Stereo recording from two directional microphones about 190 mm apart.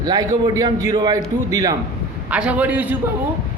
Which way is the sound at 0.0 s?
20° right (ahead or behind).